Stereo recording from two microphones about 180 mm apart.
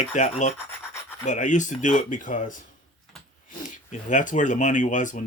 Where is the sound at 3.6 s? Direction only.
45° left (ahead or behind).